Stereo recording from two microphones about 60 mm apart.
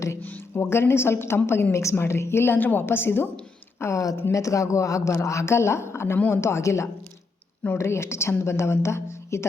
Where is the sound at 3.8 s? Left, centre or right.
Left.